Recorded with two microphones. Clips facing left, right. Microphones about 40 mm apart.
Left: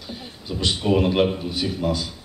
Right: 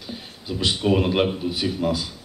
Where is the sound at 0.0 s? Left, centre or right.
Centre.